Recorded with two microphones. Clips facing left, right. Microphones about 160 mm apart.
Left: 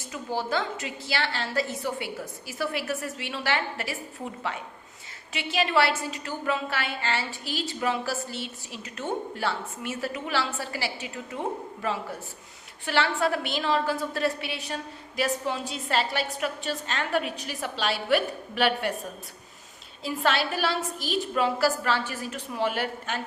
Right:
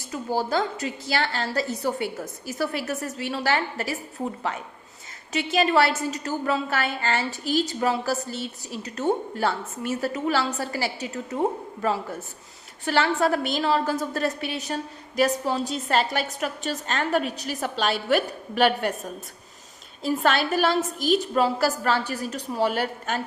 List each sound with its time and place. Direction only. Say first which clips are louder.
0.1 s a woman's voice: right 4 dB; 40° right (ahead or behind)
20.0 s a woman's voice: right 4 dB; 45° right (ahead or behind)